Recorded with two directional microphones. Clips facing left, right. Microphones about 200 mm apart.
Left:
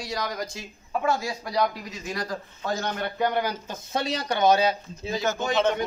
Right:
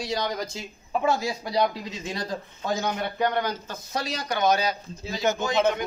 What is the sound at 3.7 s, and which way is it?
A man's voice, 25° left (ahead or behind).